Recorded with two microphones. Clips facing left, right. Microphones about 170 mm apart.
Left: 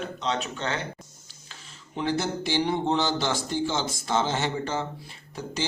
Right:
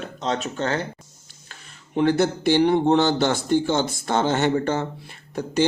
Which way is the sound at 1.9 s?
60° right (ahead or behind).